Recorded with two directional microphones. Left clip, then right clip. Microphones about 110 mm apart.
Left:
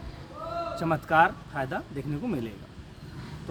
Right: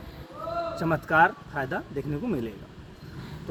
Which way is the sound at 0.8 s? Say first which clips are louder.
Right 1 dB; 25° left (ahead or behind).